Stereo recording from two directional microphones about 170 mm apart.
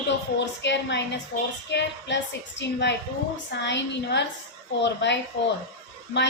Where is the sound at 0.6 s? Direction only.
90° left.